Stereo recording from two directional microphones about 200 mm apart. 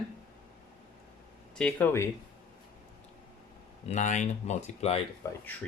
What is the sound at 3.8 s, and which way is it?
Speech, 35° left (ahead or behind).